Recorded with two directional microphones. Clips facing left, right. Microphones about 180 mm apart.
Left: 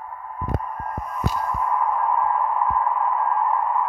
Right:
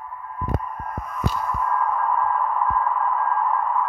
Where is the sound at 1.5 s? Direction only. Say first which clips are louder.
Left 1 dB; 15° left (ahead or behind).